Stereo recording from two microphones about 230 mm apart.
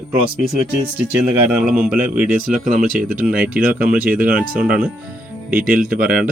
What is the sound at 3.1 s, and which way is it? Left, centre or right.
Speech, centre.